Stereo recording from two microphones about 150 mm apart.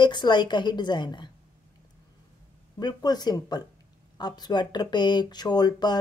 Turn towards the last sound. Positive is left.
turn(degrees=30)  # may be behind; listen again after turning